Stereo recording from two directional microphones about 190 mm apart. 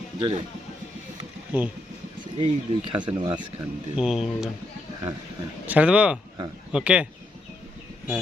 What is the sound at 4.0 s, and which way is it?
Speech, centre (ahead or behind).